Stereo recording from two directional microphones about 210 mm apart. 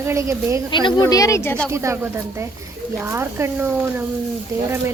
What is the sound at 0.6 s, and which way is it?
Speech, 20° left (ahead or behind).